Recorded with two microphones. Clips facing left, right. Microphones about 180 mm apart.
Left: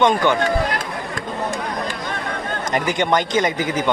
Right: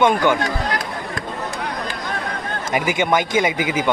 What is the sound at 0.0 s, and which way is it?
Speech, 10° right (ahead or behind).